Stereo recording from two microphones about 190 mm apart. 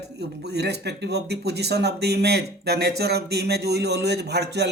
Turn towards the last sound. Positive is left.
turn(degrees=-60)  # may be behind; listen again after turning